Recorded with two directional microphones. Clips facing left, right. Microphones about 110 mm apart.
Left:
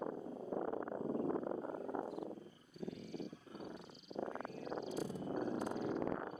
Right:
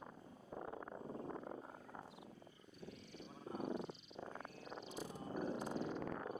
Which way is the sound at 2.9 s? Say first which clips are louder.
Left 10 dB; 45° left (ahead or behind).